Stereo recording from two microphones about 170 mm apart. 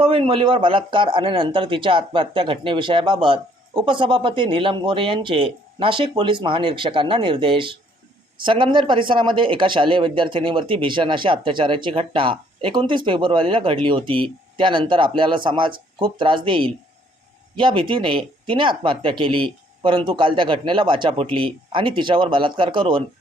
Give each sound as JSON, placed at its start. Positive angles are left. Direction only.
{"t": 0.0, "sound": "speech", "side_deg": -35}